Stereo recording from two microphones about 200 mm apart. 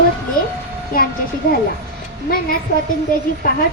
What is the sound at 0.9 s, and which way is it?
Speech, 45° left (ahead or behind).